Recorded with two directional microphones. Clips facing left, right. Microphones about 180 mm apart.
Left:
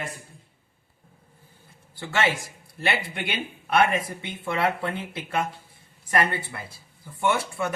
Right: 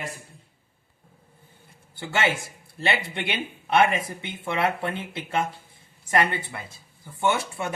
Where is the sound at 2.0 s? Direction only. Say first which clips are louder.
Even; 25° right (ahead or behind).